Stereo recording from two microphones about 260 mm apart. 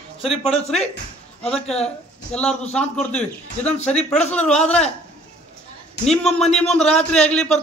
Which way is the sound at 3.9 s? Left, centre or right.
Left.